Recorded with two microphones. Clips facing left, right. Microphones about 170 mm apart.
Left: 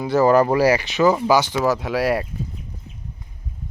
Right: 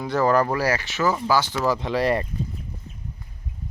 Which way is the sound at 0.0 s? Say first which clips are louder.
Left 5 dB; 5° left (ahead or behind).